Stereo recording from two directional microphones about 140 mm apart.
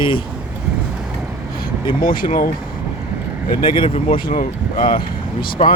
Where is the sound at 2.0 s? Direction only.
90° left.